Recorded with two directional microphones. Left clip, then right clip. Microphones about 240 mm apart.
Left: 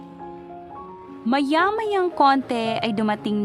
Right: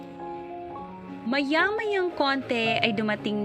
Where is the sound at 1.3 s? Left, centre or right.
Left.